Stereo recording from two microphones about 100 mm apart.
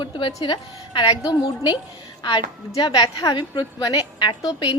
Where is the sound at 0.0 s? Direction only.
55° left (ahead or behind).